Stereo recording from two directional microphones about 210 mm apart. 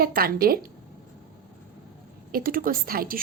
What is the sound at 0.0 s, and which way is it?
Speech, 45° right (ahead or behind).